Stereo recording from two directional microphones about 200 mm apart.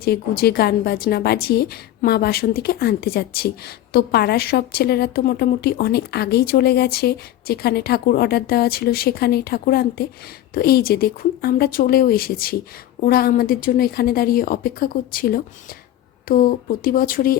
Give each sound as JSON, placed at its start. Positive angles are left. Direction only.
{"t": 0.0, "sound": "a woman's voice", "side_deg": 50}